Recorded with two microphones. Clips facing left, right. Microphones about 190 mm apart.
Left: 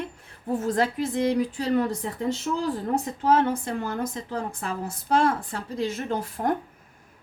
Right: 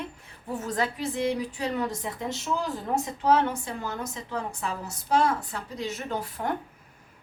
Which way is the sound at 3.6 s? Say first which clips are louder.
Left 5 dB; 55° left (ahead or behind).